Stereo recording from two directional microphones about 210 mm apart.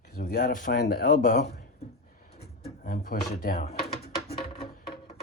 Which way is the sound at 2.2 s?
45° left (ahead or behind).